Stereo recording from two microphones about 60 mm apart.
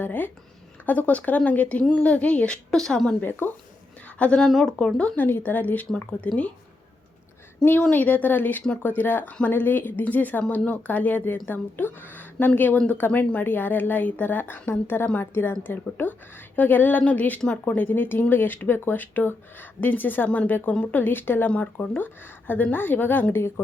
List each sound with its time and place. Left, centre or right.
0.0 s speech: left
2.6 s speech: centre
3.2 s speech: left
4.2 s speech: centre
4.4 s speech: centre
5.1 s speech: left
7.8 s a woman's voice: left
21.5 s speech: left